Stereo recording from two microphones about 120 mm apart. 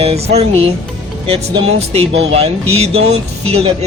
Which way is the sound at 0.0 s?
60° right (ahead or behind).